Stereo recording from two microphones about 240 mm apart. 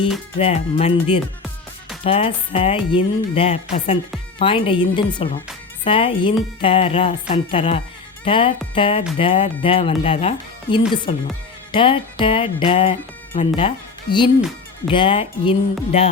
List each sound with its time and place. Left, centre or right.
0.3 s a woman's voice: left